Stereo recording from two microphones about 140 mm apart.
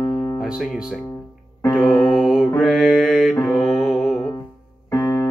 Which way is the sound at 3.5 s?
20° left (ahead or behind).